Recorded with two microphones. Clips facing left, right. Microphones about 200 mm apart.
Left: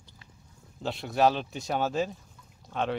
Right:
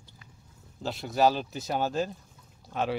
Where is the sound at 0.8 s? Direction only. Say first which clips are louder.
Even; centre (ahead or behind).